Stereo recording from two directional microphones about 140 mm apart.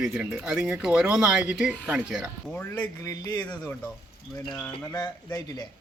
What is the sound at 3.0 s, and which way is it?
Speech, 25° left (ahead or behind).